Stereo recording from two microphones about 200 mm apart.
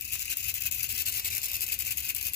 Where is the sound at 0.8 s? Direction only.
50° left (ahead or behind).